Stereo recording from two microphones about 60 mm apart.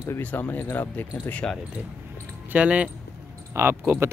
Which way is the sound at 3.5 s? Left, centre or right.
Right.